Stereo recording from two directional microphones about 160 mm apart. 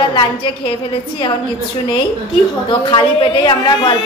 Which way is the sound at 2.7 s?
30° left (ahead or behind).